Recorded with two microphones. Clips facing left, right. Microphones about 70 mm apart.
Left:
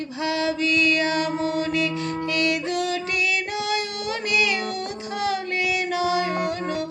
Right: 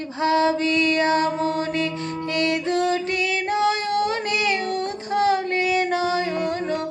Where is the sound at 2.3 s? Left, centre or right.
Right.